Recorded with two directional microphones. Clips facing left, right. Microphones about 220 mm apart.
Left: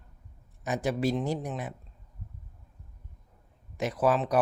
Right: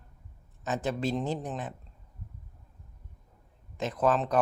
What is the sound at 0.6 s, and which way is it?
Speech, 10° left (ahead or behind).